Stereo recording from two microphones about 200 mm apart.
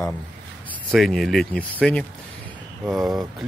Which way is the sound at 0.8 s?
Centre (ahead or behind).